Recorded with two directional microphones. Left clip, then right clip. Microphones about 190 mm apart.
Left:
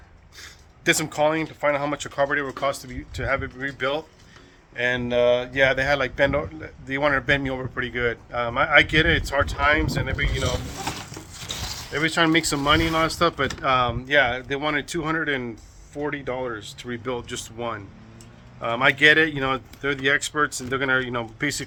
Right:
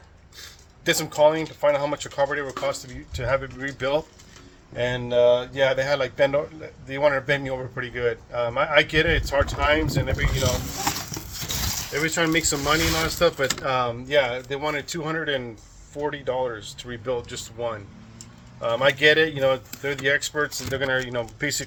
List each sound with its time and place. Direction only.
0.3 s speech: 25° left (ahead or behind)
11.9 s speech: 25° left (ahead or behind)